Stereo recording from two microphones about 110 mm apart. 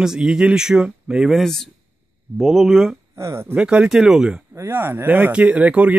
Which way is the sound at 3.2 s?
25° right (ahead or behind).